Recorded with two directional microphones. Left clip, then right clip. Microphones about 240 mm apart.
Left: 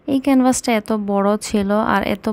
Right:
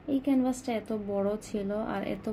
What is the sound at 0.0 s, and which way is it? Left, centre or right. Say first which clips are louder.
A woman's voice: left 12 dB; left.